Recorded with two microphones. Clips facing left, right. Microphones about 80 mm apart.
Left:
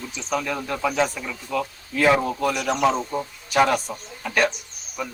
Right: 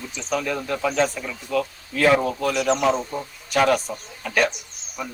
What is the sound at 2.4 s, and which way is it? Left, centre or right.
Speech, centre.